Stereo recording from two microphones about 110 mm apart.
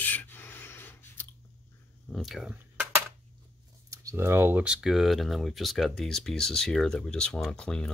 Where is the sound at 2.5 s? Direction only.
15° right (ahead or behind).